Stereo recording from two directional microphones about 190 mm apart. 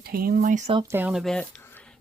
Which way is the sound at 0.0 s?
50° right (ahead or behind).